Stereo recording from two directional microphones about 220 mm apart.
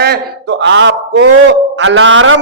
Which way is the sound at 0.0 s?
50° right (ahead or behind).